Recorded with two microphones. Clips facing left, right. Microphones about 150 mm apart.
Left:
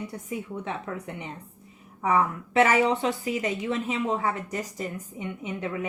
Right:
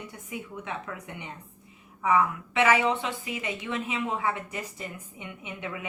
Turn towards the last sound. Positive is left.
turn(degrees=35)  # may be behind; listen again after turning